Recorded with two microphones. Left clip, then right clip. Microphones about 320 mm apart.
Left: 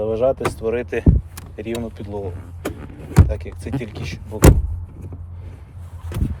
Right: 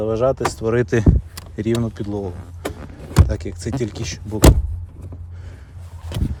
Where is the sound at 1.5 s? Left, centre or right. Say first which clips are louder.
Right 5 dB; right.